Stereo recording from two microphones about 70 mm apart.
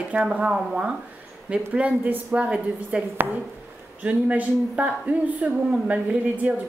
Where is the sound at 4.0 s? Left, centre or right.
Right.